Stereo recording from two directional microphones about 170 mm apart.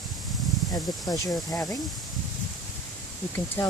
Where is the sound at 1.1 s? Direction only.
20° left (ahead or behind).